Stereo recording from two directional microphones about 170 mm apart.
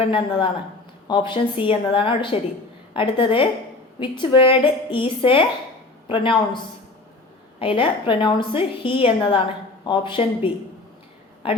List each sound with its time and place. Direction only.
0.0 s a woman's voice: 30° left (ahead or behind)
7.6 s a woman's voice: 30° left (ahead or behind)